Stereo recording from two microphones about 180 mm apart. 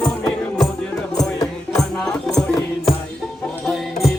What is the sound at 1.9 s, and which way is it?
Music, 5° left (ahead or behind).